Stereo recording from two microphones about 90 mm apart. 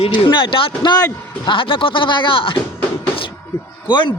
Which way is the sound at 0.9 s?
50° left (ahead or behind).